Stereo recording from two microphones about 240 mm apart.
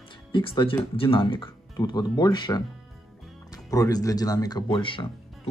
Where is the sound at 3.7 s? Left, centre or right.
Centre.